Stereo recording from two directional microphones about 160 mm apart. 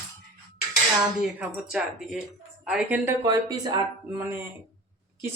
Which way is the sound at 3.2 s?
25° right (ahead or behind).